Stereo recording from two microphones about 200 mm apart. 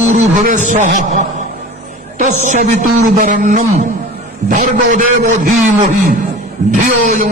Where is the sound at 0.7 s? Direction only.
40° right (ahead or behind).